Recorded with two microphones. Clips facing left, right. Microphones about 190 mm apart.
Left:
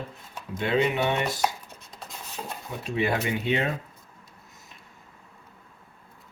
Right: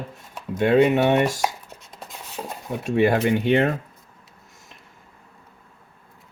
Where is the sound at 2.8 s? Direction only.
45° right (ahead or behind).